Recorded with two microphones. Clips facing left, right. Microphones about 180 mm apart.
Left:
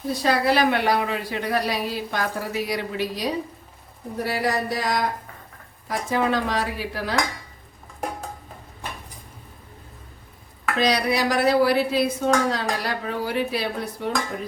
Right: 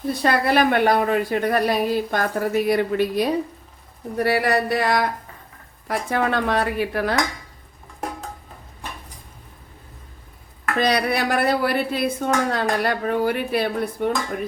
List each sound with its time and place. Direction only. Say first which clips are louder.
0.1 s speech: right 1 dB; 60° right (ahead or behind)
10.8 s speech: right 1 dB; 55° right (ahead or behind)